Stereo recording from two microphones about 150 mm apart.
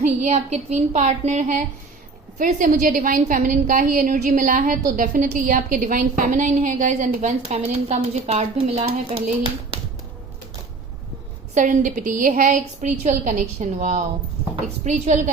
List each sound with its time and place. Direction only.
0.0 s a woman's voice: 50° right (ahead or behind)
11.5 s a woman's voice: 55° right (ahead or behind)